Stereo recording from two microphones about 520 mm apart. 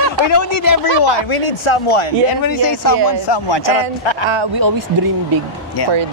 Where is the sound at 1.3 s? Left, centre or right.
Left.